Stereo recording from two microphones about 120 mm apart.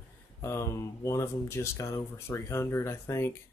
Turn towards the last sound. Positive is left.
turn(degrees=20)  # may be behind; listen again after turning